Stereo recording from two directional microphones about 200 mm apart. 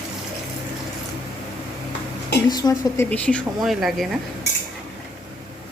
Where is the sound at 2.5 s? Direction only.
20° left (ahead or behind).